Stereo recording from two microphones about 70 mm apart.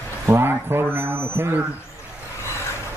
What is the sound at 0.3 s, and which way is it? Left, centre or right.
A man's voice, right.